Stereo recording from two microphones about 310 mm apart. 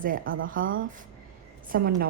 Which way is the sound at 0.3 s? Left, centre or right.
Right.